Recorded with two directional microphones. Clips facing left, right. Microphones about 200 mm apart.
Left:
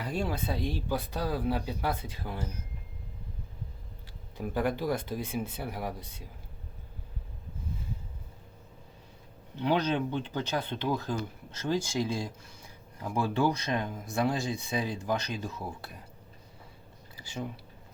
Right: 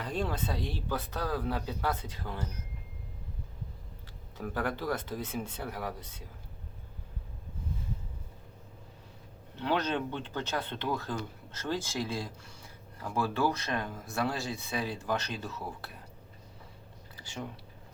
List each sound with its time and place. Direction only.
0.0 s speech: 10° left (ahead or behind)
4.4 s speech: 15° left (ahead or behind)
9.6 s speech: 15° left (ahead or behind)
17.2 s speech: 10° left (ahead or behind)